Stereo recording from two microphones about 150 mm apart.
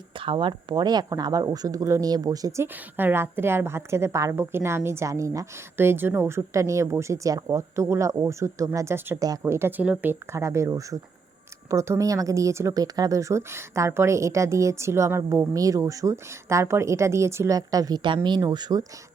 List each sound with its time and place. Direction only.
0.2 s speech: 35° right (ahead or behind)